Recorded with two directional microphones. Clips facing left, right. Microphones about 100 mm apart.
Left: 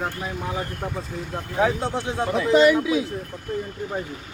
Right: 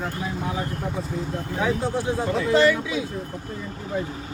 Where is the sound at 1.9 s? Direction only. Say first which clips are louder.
Even; 20° left (ahead or behind).